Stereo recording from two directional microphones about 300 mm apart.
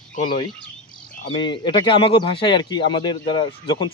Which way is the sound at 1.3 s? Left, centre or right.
Centre.